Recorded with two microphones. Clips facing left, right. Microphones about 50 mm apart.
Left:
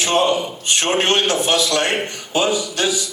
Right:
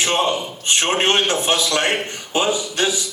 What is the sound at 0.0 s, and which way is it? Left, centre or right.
A man's voice, right.